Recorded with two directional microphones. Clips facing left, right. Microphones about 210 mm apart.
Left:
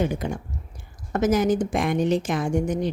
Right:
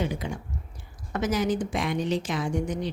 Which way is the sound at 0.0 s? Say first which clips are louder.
Left 5 dB; 50° left (ahead or behind).